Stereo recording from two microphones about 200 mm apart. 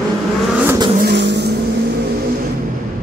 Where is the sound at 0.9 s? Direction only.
55° right (ahead or behind).